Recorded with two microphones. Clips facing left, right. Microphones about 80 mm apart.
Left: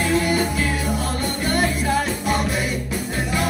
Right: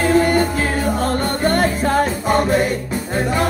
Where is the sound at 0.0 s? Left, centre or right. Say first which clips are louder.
Right 5 dB; right.